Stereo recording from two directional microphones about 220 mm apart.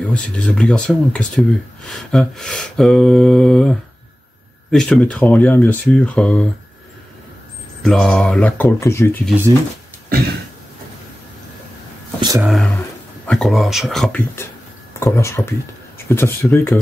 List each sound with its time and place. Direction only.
0.1 s mantra: 5° left (ahead or behind)
7.8 s speech: 5° left (ahead or behind)
12.2 s speech: 15° right (ahead or behind)
12.4 s mantra: 5° left (ahead or behind)
15.0 s speech: 10° left (ahead or behind)